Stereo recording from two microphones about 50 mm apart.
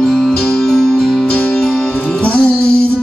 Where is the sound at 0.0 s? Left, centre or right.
Centre.